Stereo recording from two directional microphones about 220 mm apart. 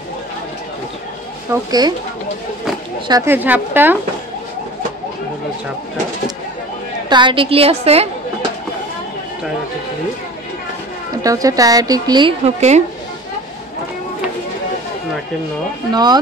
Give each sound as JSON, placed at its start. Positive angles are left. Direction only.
{"t": 1.5, "sound": "a woman's voice", "side_deg": -15}
{"t": 3.1, "sound": "a woman's voice", "side_deg": -10}
{"t": 7.1, "sound": "a woman's voice", "side_deg": -20}
{"t": 11.2, "sound": "a woman's voice", "side_deg": -15}
{"t": 15.9, "sound": "a woman's voice", "side_deg": -20}